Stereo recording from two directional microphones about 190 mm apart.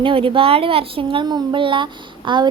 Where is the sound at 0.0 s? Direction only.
25° right (ahead or behind).